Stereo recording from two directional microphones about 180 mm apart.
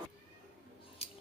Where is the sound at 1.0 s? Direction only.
35° left (ahead or behind).